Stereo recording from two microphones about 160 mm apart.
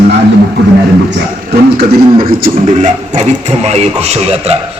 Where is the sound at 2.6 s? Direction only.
50° right (ahead or behind).